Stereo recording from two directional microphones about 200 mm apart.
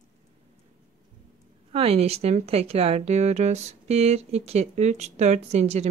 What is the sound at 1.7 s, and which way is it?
Speech, 30° right (ahead or behind).